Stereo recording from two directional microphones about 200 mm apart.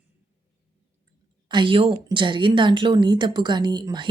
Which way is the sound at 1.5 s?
25° right (ahead or behind).